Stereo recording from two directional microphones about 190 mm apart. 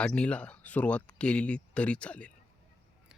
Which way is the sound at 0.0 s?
5° left (ahead or behind).